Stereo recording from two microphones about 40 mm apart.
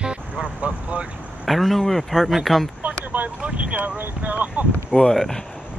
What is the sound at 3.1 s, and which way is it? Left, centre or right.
Speech, right.